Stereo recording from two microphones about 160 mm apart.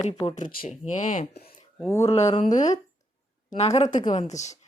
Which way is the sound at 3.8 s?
50° left (ahead or behind).